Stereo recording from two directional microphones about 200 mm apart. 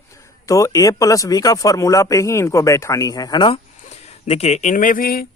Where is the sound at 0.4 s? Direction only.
15° left (ahead or behind).